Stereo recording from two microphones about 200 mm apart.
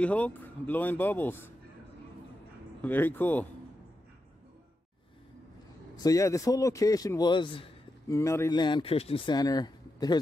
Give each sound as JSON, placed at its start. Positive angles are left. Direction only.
{"t": 0.0, "sound": "speech", "side_deg": 5}
{"t": 2.8, "sound": "speech", "side_deg": 10}
{"t": 5.9, "sound": "speech", "side_deg": 15}